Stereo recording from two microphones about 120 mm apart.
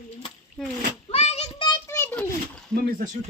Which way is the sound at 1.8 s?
20° left (ahead or behind).